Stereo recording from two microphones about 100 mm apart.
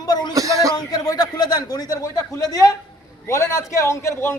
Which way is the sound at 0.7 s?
40° left (ahead or behind).